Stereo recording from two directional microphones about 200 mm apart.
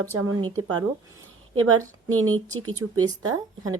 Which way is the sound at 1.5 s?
90° right.